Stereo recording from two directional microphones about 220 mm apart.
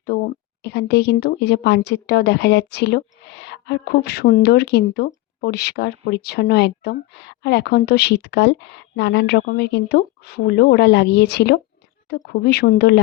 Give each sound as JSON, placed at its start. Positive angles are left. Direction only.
{"t": 0.1, "sound": "speech", "side_deg": 45}